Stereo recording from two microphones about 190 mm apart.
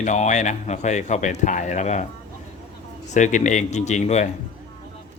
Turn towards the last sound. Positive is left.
turn(degrees=40)  # may be behind; listen again after turning